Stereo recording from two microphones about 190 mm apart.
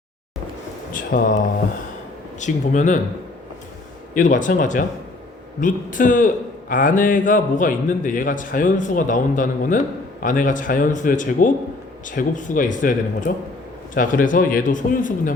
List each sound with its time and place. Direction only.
1.1 s a man's voice: 50° left (ahead or behind)
2.4 s speech: 40° left (ahead or behind)
4.1 s a man's voice: 40° left (ahead or behind)